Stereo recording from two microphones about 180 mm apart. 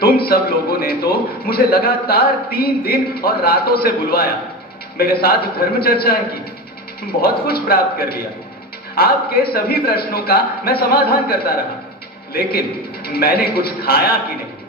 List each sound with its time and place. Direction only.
0.0 s a man's voice: 60° left (ahead or behind)